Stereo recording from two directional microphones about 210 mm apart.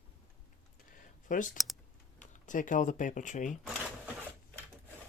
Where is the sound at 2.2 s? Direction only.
35° left (ahead or behind).